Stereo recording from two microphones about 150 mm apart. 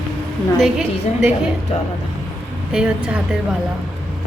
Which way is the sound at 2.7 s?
5° right (ahead or behind).